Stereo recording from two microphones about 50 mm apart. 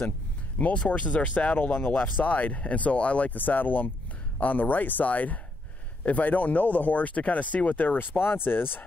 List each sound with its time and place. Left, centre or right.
0.6 s speech: left